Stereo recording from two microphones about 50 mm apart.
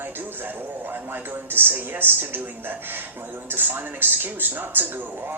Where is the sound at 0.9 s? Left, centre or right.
Right.